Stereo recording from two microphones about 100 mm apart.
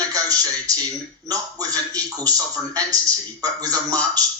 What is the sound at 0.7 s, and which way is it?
Speech, 35° right (ahead or behind).